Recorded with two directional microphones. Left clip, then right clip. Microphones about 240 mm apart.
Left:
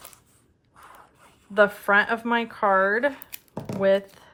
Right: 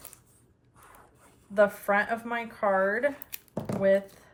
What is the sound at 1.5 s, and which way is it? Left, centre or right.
Speech, centre.